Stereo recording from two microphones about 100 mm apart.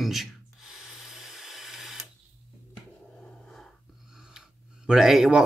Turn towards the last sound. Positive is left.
turn(degrees=-5)  # may be behind; listen again after turning